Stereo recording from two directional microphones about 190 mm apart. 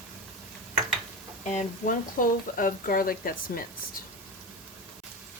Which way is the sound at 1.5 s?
40° left (ahead or behind).